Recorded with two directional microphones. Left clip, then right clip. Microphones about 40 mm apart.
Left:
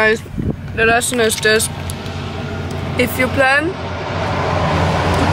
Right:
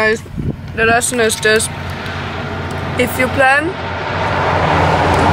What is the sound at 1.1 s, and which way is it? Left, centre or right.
Speech, centre.